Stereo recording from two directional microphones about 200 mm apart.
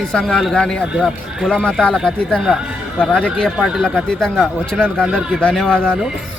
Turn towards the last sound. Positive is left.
turn(degrees=0)  # may be behind; listen again after turning